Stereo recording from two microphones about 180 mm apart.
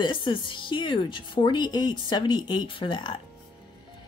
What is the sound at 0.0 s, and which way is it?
Speech, 25° left (ahead or behind).